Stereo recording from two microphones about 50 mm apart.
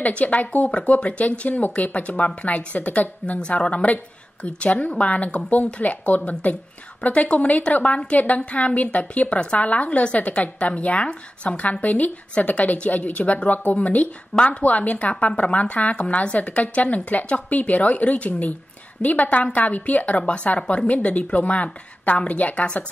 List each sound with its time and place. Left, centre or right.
0.0 s a woman's voice: left